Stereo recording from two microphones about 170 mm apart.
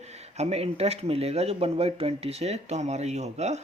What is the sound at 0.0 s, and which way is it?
Speech, 40° right (ahead or behind).